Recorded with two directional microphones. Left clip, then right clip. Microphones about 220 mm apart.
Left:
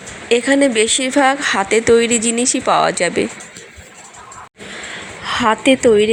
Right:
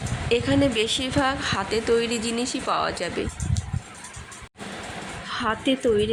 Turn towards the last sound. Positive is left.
turn(degrees=20)  # may be behind; listen again after turning